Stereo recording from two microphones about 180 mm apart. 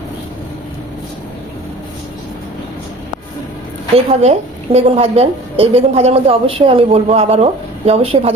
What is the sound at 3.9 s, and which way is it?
A woman's voice, 35° right (ahead or behind).